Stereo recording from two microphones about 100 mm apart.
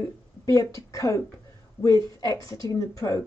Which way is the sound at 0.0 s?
35° left (ahead or behind).